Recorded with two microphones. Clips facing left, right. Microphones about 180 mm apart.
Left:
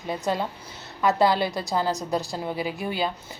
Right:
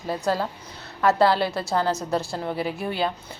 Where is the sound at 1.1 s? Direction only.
15° left (ahead or behind).